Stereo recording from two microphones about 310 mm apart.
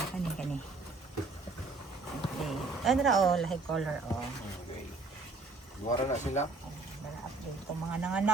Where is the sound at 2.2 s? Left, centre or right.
Centre.